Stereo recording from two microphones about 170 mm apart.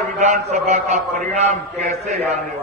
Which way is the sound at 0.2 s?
45° right (ahead or behind).